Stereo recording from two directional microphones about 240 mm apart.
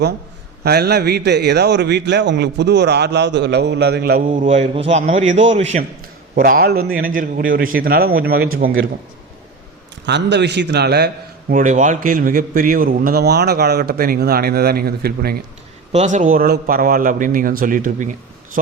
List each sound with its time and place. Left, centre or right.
0.6 s a man's voice: right
4.4 s a man's voice: right
6.3 s a man's voice: right
10.1 s a man's voice: right
15.9 s a man's voice: right